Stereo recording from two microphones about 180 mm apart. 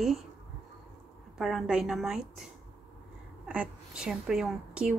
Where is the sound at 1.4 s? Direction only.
Centre (ahead or behind).